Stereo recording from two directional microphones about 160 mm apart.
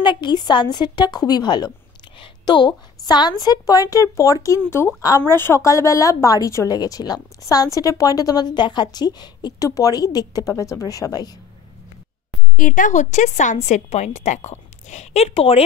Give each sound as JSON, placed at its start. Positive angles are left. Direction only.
{"t": 0.0, "sound": "a woman's voice", "side_deg": 30}
{"t": 12.5, "sound": "a woman's voice", "side_deg": 55}